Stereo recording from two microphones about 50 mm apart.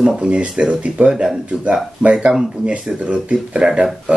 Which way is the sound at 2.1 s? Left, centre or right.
Centre.